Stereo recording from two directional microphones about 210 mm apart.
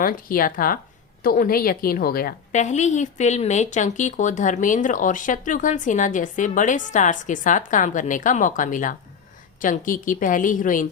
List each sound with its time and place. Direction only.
0.0 s a woman's voice: 40° left (ahead or behind)